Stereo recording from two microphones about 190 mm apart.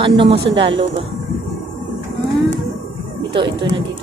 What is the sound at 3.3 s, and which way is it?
Speech, 25° right (ahead or behind).